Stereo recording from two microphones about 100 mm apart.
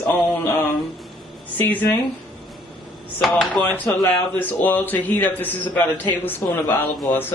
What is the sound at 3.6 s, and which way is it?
A man's voice, 15° left (ahead or behind).